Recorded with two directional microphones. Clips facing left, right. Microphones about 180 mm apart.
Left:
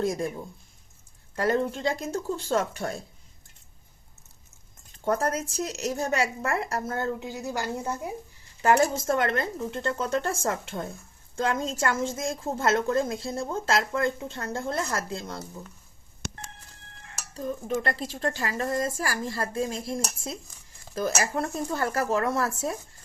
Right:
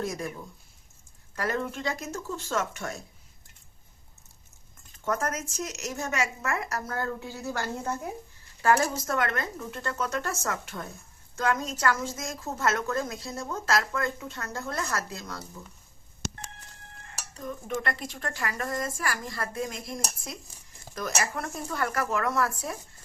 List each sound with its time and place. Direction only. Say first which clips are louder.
0.0 s a woman's voice: left 5 dB; 30° left (ahead or behind)
5.0 s a woman's voice: left 4 dB; 30° left (ahead or behind); by 8.1 s 10° left (ahead or behind)
8.6 s a woman's voice: left 3 dB; 25° left (ahead or behind)
16.2 s telephone dialing: right 1 dB; 55° left (ahead or behind)
17.3 s a woman's voice: left 4 dB; 30° left (ahead or behind)